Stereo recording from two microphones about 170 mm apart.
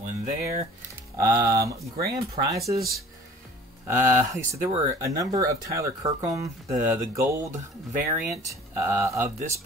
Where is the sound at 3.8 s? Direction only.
15° right (ahead or behind).